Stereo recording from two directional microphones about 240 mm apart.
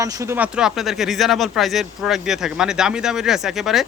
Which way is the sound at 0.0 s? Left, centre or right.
Centre.